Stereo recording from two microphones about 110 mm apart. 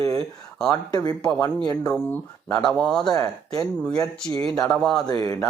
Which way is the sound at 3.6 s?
10° left (ahead or behind).